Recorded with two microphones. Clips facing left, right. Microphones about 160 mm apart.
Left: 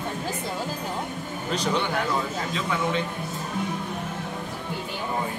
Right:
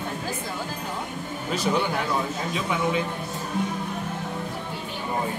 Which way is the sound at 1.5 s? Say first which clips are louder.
Right 1 dB; 5° right (ahead or behind).